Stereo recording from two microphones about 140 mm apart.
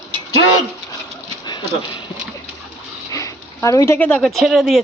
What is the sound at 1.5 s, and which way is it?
Speech, 35° left (ahead or behind).